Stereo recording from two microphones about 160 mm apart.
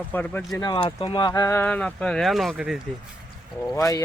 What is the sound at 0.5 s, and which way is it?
Speech, 25° left (ahead or behind).